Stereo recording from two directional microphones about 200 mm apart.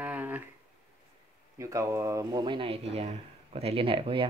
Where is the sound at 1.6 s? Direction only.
15° right (ahead or behind).